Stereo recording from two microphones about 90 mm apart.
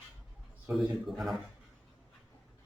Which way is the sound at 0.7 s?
Centre (ahead or behind).